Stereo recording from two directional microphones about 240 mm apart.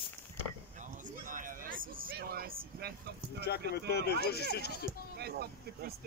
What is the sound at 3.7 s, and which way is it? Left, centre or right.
Speech, left.